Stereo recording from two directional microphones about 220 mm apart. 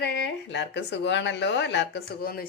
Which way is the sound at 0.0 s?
50° left (ahead or behind).